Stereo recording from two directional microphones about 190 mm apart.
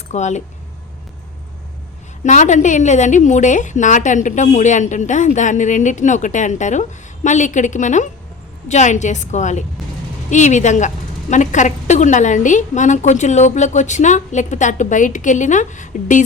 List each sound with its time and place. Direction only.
0.1 s a woman's voice: 40° left (ahead or behind)
2.2 s a woman's voice: 40° left (ahead or behind)